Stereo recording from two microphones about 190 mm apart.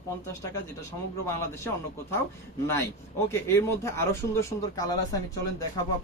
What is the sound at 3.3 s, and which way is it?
Speech, 15° left (ahead or behind).